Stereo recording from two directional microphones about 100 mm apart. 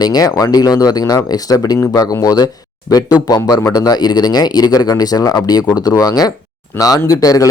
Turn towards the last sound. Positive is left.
turn(degrees=35)  # may be behind; listen again after turning